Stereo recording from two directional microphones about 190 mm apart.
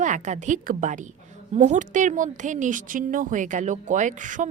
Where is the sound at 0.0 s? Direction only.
40° right (ahead or behind).